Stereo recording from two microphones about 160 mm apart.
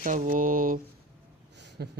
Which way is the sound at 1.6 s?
90° right.